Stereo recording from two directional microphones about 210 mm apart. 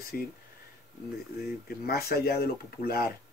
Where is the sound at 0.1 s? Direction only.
45° left (ahead or behind).